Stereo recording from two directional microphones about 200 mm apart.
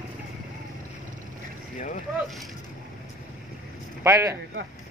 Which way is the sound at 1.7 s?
35° left (ahead or behind).